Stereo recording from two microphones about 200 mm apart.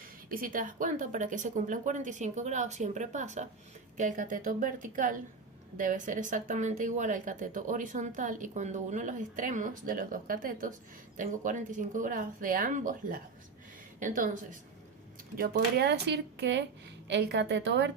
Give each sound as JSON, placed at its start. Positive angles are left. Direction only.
{"t": 0.3, "sound": "speech", "side_deg": -45}
{"t": 15.4, "sound": "speech", "side_deg": -50}